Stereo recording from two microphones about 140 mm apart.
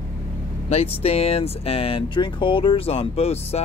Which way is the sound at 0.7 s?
45° left (ahead or behind).